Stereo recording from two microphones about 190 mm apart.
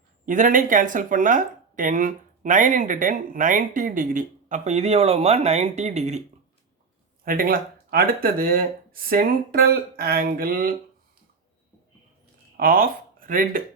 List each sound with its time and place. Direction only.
0.3 s speech: 45° right (ahead or behind)
7.3 s speech: 50° right (ahead or behind)
12.5 s speech: 50° right (ahead or behind)